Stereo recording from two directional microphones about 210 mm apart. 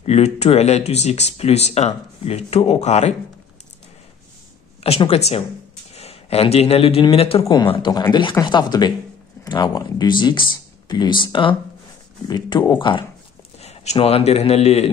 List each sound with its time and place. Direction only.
0.0 s speech: 30° left (ahead or behind)
4.8 s a man's voice: 30° left (ahead or behind)